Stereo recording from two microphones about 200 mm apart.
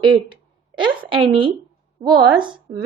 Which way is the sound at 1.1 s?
25° right (ahead or behind).